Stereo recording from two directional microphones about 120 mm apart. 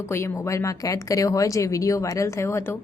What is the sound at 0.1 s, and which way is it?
A woman's voice, 25° left (ahead or behind).